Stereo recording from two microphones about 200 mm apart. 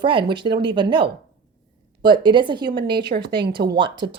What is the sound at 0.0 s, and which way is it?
Speech, 25° right (ahead or behind).